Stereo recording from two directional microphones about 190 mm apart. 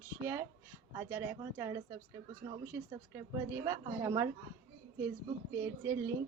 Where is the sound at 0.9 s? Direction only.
10° right (ahead or behind).